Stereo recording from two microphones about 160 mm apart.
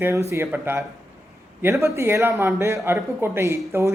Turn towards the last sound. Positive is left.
turn(degrees=-15)  # may be behind; listen again after turning